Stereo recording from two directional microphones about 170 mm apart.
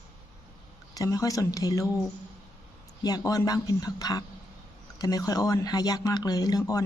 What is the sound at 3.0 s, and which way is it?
Speech, 20° left (ahead or behind).